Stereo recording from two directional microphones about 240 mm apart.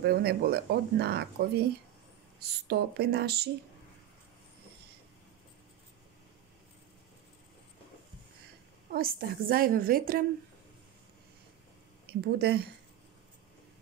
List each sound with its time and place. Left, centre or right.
0.0 s speech: right
8.9 s speech: right
12.1 s speech: right